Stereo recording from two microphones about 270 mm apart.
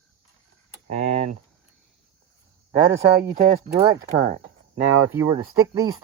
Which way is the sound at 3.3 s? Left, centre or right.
Right.